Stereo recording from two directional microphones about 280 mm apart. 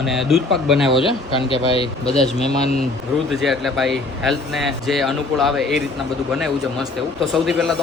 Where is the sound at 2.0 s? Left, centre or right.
Centre.